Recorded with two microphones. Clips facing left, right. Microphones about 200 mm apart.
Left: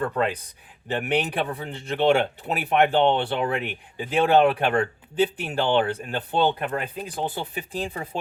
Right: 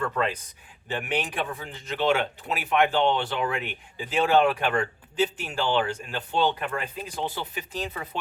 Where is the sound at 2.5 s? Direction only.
55° left (ahead or behind).